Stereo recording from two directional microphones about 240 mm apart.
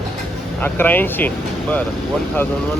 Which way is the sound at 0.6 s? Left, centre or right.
Centre.